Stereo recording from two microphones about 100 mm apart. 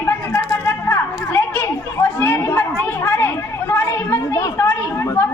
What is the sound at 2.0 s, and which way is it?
Chatter, 15° left (ahead or behind).